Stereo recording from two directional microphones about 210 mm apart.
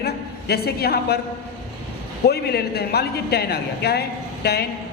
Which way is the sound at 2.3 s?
50° left (ahead or behind).